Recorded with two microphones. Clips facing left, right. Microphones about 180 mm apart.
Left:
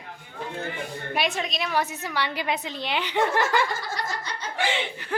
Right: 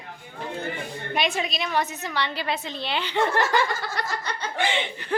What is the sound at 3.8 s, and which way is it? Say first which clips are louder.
Snicker: right 2 dB; 60° right (ahead or behind).